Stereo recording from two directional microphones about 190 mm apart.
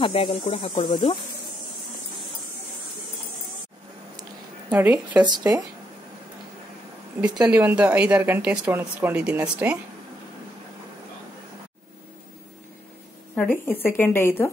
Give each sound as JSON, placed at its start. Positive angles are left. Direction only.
{"t": 0.0, "sound": "speech", "side_deg": 30}
{"t": 4.6, "sound": "speech", "side_deg": -10}
{"t": 7.4, "sound": "speech", "side_deg": -5}
{"t": 13.3, "sound": "speech", "side_deg": 10}